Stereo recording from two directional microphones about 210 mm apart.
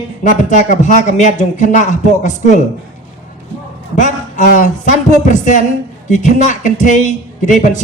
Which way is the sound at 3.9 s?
35° left (ahead or behind).